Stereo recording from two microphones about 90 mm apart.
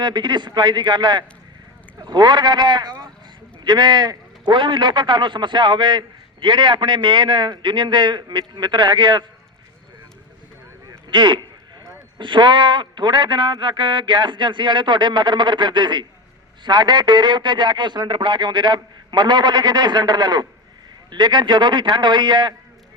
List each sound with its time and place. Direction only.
0.0 s a man's voice: 55° right (ahead or behind)
11.1 s a man's voice: 60° right (ahead or behind)